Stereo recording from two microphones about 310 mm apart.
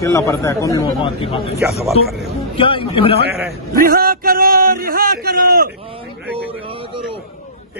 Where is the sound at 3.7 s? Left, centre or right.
Right.